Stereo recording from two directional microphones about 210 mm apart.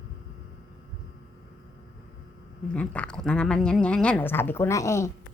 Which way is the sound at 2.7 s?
5° left (ahead or behind).